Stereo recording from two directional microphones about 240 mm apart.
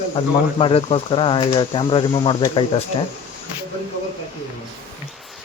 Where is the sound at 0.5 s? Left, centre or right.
Left.